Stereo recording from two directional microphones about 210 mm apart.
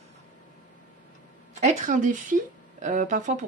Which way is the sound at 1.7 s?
40° right (ahead or behind).